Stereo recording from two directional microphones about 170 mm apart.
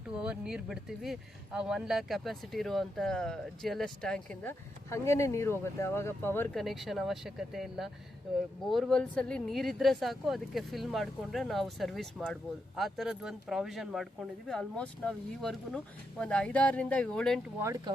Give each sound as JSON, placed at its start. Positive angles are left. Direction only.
{"t": 0.2, "sound": "speech", "side_deg": -5}
{"t": 4.9, "sound": "speech", "side_deg": 15}
{"t": 6.6, "sound": "speech", "side_deg": 0}
{"t": 17.6, "sound": "speech", "side_deg": -20}